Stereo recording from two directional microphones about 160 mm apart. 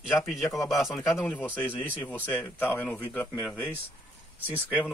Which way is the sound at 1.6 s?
10° left (ahead or behind).